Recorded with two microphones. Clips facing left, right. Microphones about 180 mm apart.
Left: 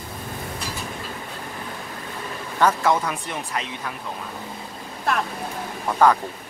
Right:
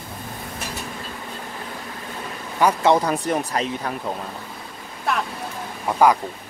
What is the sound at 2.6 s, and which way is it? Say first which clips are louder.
Speech: right 1 dB; 10° right (ahead or behind).